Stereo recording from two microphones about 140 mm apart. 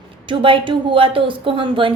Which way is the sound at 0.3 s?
35° right (ahead or behind).